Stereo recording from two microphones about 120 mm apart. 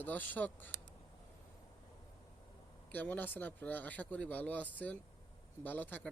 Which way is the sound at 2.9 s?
10° left (ahead or behind).